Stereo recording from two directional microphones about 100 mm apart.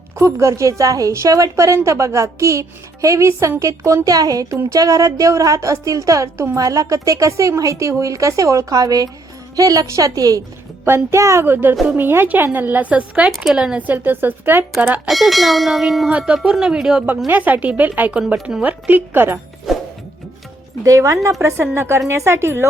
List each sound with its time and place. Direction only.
0.2 s a woman's voice: 30° right (ahead or behind)
10.8 s a woman's voice: 25° right (ahead or behind)
15.0 s a woman's voice: centre (ahead or behind); by 19.4 s 20° right (ahead or behind)
20.8 s a woman's voice: 30° right (ahead or behind)